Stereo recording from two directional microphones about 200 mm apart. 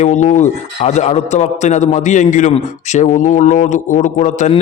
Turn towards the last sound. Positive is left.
turn(degrees=35)  # may be behind; listen again after turning